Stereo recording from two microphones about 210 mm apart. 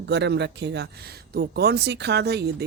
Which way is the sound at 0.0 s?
55° right (ahead or behind).